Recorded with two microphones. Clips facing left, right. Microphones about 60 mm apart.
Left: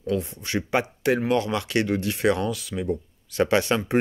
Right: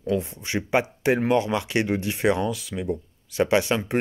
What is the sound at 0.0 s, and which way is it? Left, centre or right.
Speech, right.